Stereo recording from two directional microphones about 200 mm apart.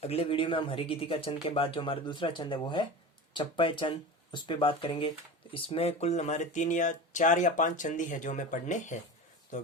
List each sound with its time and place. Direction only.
0.0 s speech: 30° left (ahead or behind)